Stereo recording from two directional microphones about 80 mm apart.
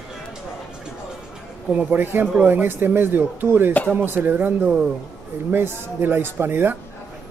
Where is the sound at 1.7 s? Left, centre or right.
Right.